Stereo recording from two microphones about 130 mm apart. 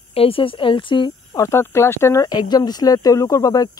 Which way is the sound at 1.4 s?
20° left (ahead or behind).